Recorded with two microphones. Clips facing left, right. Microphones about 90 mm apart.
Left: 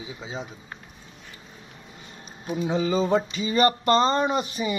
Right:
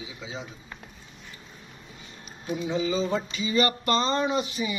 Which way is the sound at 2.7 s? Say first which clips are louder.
Left 4 dB; 40° left (ahead or behind).